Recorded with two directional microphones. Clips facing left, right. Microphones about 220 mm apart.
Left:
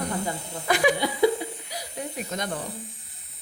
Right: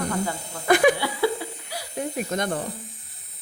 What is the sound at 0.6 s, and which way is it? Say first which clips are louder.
Speech: right 5 dB; 55° right (ahead or behind).